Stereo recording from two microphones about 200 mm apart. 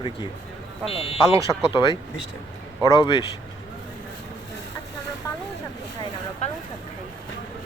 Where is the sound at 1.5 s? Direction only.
20° left (ahead or behind).